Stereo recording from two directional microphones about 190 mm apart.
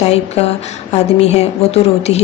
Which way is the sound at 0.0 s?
35° left (ahead or behind).